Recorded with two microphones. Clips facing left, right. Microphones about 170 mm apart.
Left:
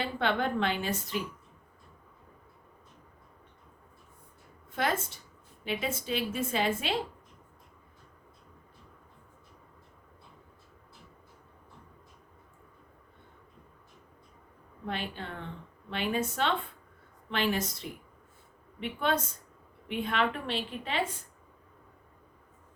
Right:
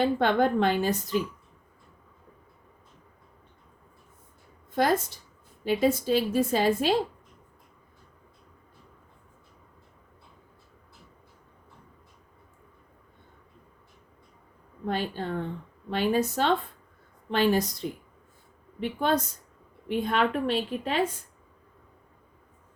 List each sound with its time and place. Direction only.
0.0 s a woman's voice: 40° right (ahead or behind)
4.7 s a woman's voice: 40° right (ahead or behind)
14.8 s a woman's voice: 40° right (ahead or behind)